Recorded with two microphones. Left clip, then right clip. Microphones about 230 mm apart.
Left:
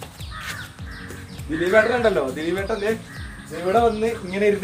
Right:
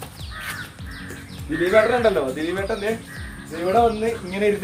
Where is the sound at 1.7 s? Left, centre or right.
Centre.